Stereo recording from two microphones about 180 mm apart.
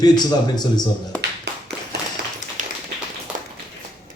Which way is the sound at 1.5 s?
65° right (ahead or behind).